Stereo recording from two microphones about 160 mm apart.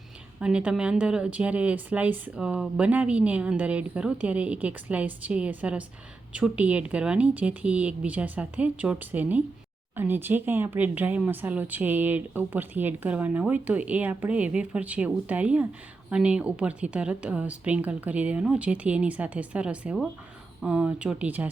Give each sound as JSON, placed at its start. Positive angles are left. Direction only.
{"t": 0.3, "sound": "speech", "side_deg": -5}